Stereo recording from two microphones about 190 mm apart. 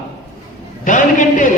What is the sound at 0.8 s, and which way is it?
Speech, 45° left (ahead or behind).